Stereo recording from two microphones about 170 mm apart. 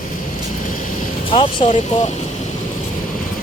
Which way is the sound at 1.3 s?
30° left (ahead or behind).